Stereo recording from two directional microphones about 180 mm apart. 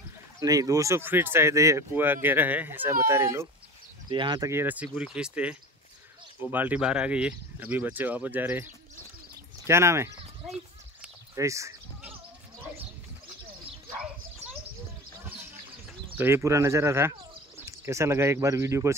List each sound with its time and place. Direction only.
0.4 s speech: 20° right (ahead or behind)
4.1 s speech: 25° right (ahead or behind)
4.5 s speech: 10° right (ahead or behind)
11.3 s a sound: 15° right (ahead or behind)
16.2 s speech: 15° right (ahead or behind)